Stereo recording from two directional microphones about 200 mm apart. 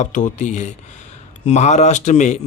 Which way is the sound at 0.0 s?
40° left (ahead or behind).